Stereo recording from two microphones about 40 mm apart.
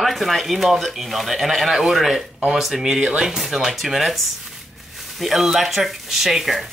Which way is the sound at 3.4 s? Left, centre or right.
Centre.